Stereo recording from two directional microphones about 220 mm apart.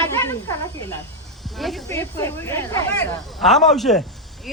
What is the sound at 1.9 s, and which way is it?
Speech, 15° left (ahead or behind).